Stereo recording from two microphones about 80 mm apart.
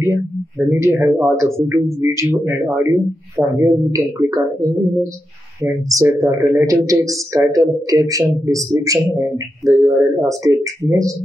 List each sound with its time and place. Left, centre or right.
0.0 s speech: right